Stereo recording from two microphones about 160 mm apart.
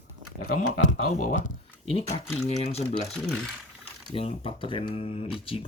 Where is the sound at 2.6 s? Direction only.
40° left (ahead or behind).